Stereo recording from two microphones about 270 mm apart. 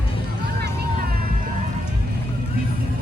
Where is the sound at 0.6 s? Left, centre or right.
Right.